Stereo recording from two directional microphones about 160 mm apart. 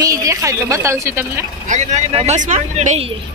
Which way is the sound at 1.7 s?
45° right (ahead or behind).